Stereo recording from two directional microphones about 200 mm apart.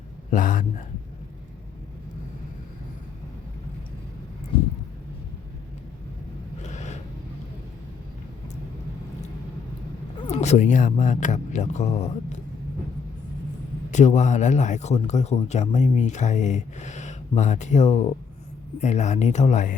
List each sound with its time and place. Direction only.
0.3 s speech: 40° left (ahead or behind)
6.6 s a sound: 35° left (ahead or behind)
10.2 s speech: 30° left (ahead or behind)
13.9 s speech: 35° left (ahead or behind)